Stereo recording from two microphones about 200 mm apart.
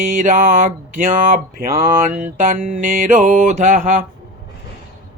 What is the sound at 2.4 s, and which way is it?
Mantra, 40° right (ahead or behind).